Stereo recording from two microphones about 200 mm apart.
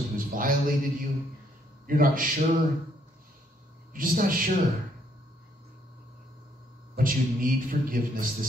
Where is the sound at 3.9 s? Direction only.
45° right (ahead or behind).